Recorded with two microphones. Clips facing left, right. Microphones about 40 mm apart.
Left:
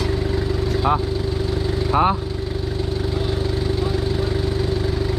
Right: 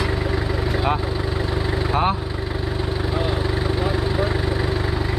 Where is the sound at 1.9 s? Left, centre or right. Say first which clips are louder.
Left 3 dB; centre.